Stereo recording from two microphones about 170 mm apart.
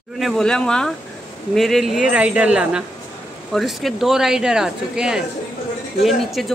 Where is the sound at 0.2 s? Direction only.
5° left (ahead or behind).